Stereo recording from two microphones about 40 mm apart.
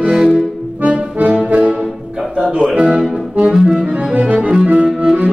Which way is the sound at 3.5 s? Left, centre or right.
Centre.